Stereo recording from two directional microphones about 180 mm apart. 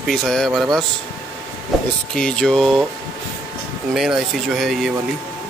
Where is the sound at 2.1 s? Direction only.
5° left (ahead or behind).